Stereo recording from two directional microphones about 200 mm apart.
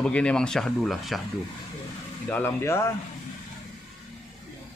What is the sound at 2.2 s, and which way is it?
Speech, 10° left (ahead or behind).